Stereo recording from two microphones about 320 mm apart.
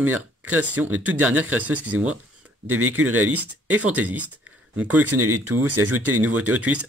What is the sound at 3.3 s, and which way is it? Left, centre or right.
Speech, centre.